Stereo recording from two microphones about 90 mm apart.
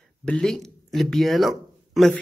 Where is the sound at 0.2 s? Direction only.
5° left (ahead or behind).